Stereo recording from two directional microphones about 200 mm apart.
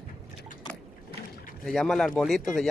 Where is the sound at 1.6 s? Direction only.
Centre (ahead or behind).